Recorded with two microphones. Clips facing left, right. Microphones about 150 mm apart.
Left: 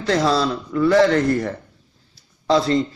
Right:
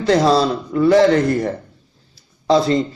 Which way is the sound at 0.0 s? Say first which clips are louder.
Right 4 dB; 20° right (ahead or behind).